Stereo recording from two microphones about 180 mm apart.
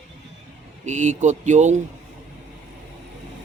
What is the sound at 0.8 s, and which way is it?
Speech, 45° right (ahead or behind).